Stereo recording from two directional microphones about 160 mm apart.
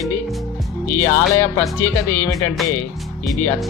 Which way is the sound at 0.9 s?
15° left (ahead or behind).